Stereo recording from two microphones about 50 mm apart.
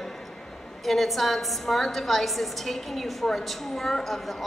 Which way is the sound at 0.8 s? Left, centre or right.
Centre.